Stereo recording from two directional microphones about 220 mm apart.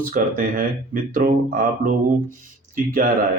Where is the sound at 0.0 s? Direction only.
40° right (ahead or behind).